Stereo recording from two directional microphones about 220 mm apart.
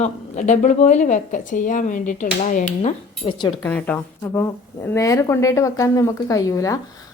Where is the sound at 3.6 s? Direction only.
5° left (ahead or behind).